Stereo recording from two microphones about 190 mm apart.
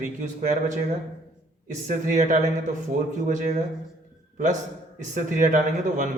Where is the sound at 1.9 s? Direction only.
40° right (ahead or behind).